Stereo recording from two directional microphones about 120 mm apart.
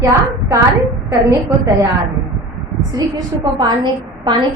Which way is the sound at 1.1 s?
25° right (ahead or behind).